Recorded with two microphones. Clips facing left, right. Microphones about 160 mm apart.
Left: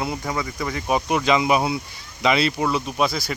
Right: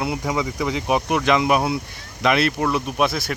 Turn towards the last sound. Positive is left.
turn(degrees=0)  # may be behind; listen again after turning